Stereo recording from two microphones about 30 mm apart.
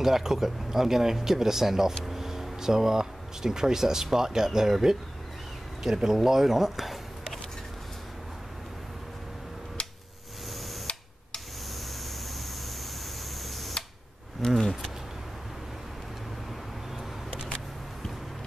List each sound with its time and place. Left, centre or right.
0.0 s speech: centre
13.4 s camera: centre
14.4 s a sound: centre